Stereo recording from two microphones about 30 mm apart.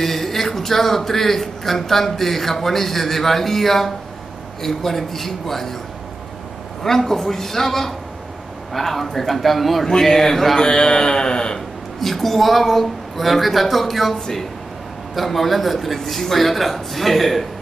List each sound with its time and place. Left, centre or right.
0.0 s speech: centre
6.8 s a man's voice: centre
10.0 s speech: centre
10.7 s a sound: left
12.0 s a man's voice: centre
15.1 s a man's voice: centre